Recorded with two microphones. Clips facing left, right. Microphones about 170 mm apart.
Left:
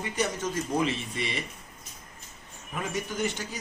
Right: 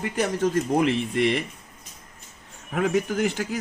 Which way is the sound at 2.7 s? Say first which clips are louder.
Right 10 dB; 70° right (ahead or behind).